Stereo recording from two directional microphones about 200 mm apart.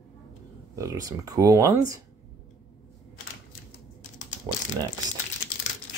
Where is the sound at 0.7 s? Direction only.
15° right (ahead or behind).